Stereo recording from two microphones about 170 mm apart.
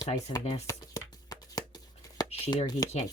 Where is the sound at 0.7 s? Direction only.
20° left (ahead or behind).